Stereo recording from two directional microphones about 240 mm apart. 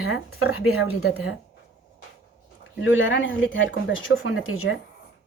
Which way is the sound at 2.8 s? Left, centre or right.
Left.